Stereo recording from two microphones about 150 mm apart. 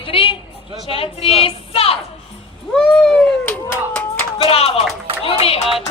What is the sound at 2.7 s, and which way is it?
Speech, 5° left (ahead or behind).